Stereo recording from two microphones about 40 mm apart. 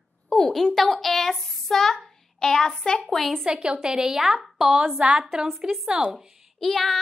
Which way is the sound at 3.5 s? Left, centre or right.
Centre.